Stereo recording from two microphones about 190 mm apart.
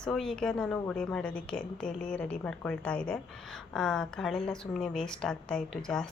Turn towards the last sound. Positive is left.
turn(degrees=5)  # may be behind; listen again after turning